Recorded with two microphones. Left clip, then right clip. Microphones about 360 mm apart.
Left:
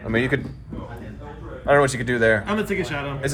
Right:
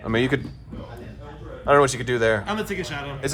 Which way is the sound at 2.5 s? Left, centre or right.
Centre.